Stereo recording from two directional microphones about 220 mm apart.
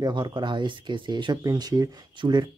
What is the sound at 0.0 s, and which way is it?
Speech, 20° right (ahead or behind).